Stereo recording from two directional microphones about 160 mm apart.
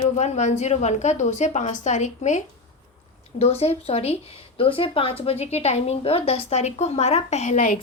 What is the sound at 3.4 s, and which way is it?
A woman's voice, 40° left (ahead or behind).